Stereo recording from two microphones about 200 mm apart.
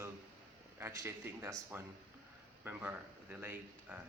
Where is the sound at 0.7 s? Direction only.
10° right (ahead or behind).